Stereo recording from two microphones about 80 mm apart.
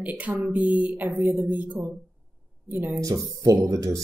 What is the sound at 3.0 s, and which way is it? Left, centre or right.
A woman's voice, right.